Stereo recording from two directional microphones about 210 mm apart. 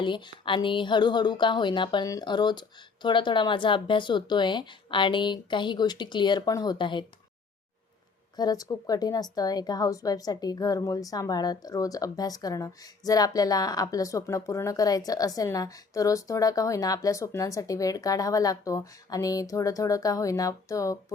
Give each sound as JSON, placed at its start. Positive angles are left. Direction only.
{"t": 0.0, "sound": "speech", "side_deg": 25}
{"t": 8.4, "sound": "a woman's voice", "side_deg": 20}